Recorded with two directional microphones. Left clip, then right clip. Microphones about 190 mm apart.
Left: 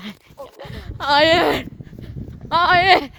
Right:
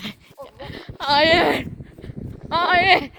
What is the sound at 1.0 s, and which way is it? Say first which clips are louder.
Speech: left 2 dB; 20° left (ahead or behind).